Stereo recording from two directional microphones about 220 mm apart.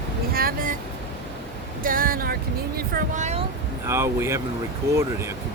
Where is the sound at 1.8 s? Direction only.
40° right (ahead or behind).